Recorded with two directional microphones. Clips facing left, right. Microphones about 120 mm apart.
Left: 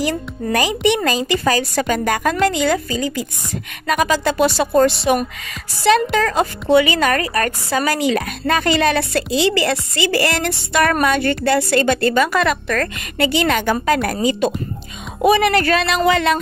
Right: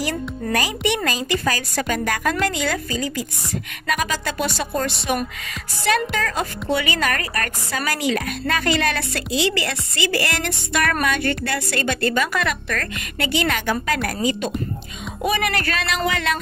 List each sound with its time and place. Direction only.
0.0 s a woman's voice: 20° left (ahead or behind)